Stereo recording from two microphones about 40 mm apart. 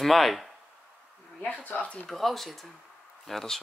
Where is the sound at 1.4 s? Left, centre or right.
Left.